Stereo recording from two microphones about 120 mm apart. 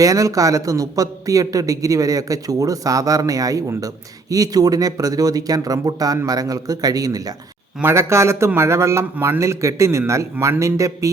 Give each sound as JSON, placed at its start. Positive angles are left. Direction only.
{"t": 0.0, "sound": "a man's voice", "side_deg": -30}
{"t": 7.8, "sound": "a man's voice", "side_deg": -20}